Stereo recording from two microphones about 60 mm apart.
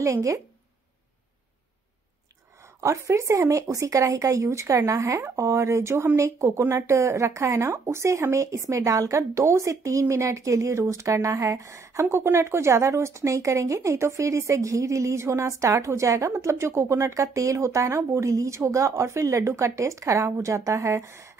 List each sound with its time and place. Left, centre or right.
0.0 s speech: right
2.8 s speech: right
7.5 s speech: right